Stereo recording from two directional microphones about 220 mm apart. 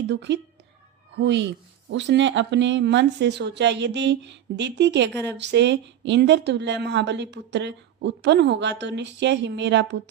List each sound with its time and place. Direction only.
0.1 s speech: 50° right (ahead or behind)